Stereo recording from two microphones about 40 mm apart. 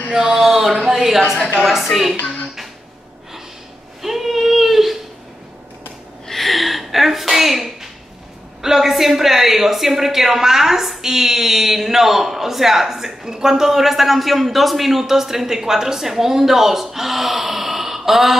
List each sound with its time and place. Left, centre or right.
0.1 s a woman's voice: centre
4.0 s child singing: centre
6.2 s a sound: centre
8.6 s speech: centre